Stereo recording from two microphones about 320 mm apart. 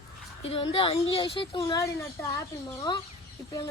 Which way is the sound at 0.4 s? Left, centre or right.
Centre.